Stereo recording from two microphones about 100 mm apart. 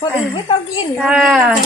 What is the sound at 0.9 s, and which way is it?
Speech, 5° right (ahead or behind).